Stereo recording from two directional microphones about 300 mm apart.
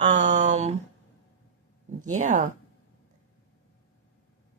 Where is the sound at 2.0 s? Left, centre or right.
Right.